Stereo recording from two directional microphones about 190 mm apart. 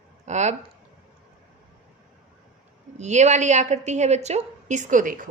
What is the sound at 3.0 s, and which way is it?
A woman's voice, 35° right (ahead or behind).